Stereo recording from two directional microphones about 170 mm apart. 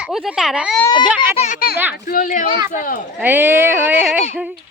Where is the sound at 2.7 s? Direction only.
55° left (ahead or behind).